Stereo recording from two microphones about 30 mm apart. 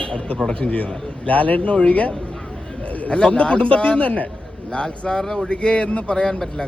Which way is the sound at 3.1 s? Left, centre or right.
Left.